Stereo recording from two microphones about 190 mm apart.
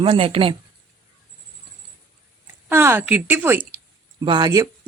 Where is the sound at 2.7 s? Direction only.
10° right (ahead or behind).